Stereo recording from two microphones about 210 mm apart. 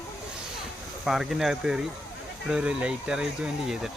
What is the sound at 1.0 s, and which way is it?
Speech, centre (ahead or behind).